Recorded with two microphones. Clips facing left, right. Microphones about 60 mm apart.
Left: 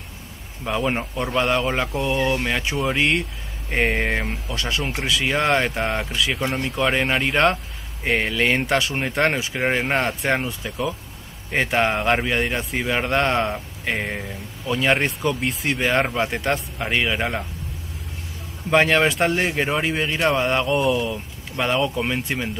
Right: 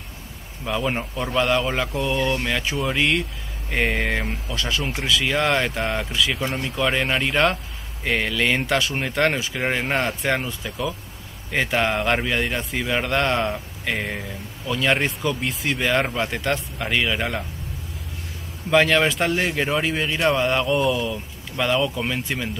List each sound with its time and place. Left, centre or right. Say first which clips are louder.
0.7 s speech: left 1 dB; centre
8.0 s speech: left 1 dB; centre
18.7 s speech: even; centre